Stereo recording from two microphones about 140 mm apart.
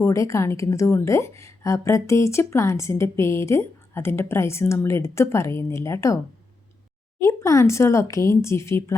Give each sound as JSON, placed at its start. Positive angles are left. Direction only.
{"t": 0.0, "sound": "a woman's voice", "side_deg": 20}
{"t": 7.2, "sound": "a woman's voice", "side_deg": 20}